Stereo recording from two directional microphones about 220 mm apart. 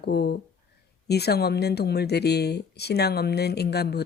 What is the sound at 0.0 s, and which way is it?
Speech, 45° left (ahead or behind).